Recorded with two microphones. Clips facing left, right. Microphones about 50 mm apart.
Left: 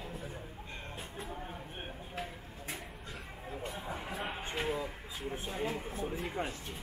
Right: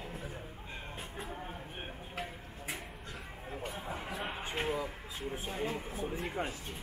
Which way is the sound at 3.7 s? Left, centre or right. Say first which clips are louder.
Even; centre.